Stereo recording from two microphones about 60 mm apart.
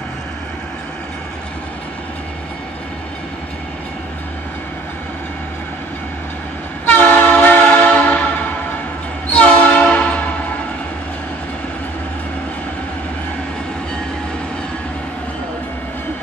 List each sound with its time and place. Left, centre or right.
6.9 s train: left
9.3 s train: left